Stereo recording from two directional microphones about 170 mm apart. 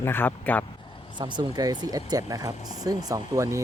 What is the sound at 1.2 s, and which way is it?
Speech, 25° right (ahead or behind).